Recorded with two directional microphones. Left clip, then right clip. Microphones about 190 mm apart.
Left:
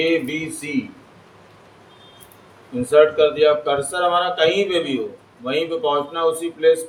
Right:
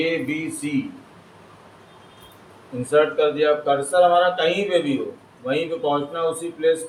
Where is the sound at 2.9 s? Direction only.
65° left (ahead or behind).